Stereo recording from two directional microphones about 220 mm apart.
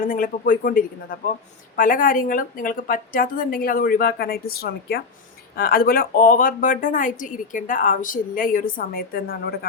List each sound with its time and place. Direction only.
0.0 s a woman's voice: 40° left (ahead or behind)